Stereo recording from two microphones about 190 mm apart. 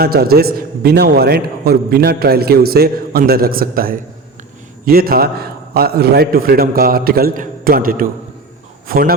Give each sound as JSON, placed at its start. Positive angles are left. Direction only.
{"t": 0.0, "sound": "a man's voice", "side_deg": -55}